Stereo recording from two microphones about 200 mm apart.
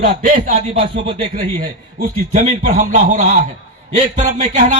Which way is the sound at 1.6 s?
40° right (ahead or behind).